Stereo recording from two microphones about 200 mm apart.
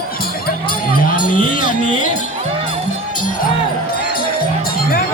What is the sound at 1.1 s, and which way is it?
Music, 40° left (ahead or behind).